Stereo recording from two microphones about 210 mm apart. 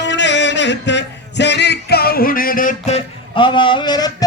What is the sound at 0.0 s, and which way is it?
Music, 55° left (ahead or behind).